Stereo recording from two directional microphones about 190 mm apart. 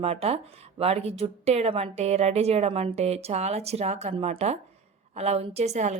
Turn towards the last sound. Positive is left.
turn(degrees=-35)  # may be behind; listen again after turning